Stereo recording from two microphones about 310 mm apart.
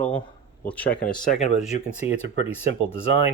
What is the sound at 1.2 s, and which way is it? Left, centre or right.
Speech, left.